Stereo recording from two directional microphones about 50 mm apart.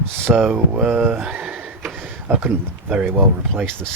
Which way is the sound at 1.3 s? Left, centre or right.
Centre.